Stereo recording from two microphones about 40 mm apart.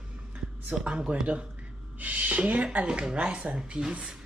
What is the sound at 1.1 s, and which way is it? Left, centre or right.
Speech, right.